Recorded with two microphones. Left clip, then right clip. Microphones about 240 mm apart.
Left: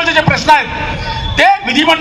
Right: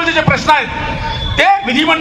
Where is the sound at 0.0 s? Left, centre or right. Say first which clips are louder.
Left 1 dB; left.